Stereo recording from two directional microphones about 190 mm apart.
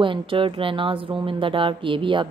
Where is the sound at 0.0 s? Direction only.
25° right (ahead or behind).